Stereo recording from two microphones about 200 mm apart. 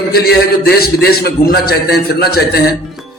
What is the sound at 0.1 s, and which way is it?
A man's voice, 50° left (ahead or behind).